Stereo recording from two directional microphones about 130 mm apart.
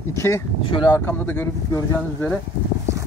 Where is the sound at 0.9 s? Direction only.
20° left (ahead or behind).